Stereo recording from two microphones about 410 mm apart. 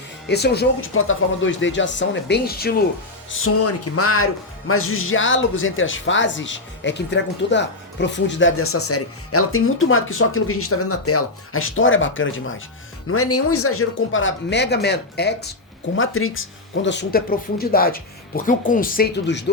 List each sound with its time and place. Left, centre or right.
0.3 s speech: left